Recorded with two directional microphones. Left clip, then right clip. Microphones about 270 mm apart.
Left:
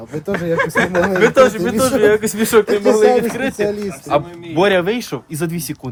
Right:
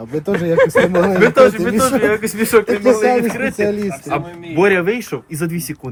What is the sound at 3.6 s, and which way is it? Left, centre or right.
Speech, right.